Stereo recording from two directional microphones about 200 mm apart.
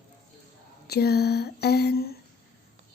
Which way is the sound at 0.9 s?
50° left (ahead or behind).